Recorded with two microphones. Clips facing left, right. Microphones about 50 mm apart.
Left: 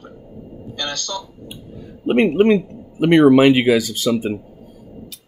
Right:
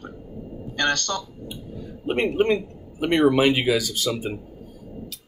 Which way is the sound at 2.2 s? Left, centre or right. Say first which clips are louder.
Left 7 dB; left.